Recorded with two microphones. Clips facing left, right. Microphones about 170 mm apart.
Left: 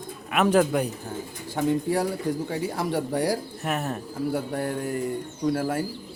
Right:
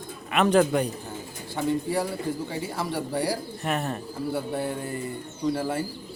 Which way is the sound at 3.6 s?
5° left (ahead or behind).